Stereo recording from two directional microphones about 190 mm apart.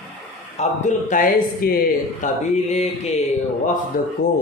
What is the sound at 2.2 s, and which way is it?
Speech, 35° left (ahead or behind).